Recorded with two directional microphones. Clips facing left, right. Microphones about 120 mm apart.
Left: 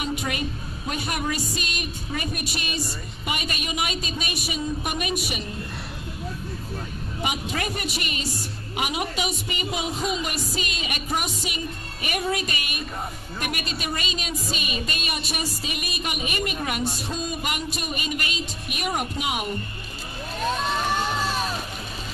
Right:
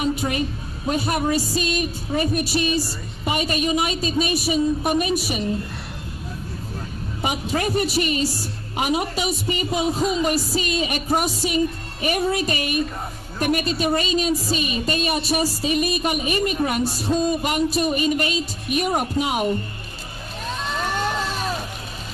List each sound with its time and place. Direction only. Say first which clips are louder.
0.0 s a woman's voice: right 5 dB; 35° right (ahead or behind)
7.2 s a man's voice: right 5 dB; 35° right (ahead or behind)